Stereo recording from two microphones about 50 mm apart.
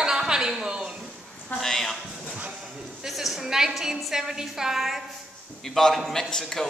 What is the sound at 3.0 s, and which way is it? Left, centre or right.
A woman's voice, centre.